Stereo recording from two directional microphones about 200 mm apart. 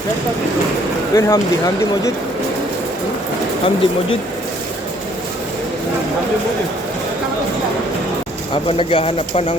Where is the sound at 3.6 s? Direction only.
25° left (ahead or behind).